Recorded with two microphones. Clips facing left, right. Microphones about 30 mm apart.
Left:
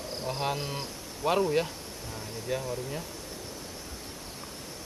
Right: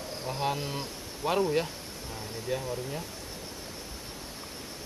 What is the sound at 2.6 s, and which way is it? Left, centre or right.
Speech, centre.